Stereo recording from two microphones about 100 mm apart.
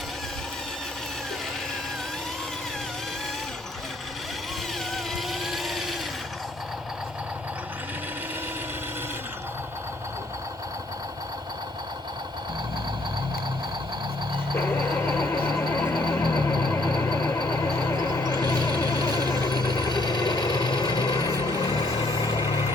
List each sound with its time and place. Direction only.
5.1 s vehicle: centre (ahead or behind)
15.8 s a sound: 5° left (ahead or behind)
16.3 s vehicle: 50° left (ahead or behind)
16.9 s vehicle: 5° left (ahead or behind)
17.9 s a sound: 35° left (ahead or behind)
18.9 s vehicle: 40° right (ahead or behind)
19.3 s vehicle: 45° left (ahead or behind)
21.7 s vehicle: 45° left (ahead or behind)